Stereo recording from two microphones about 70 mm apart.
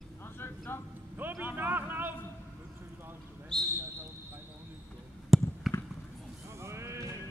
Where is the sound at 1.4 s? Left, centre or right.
Right.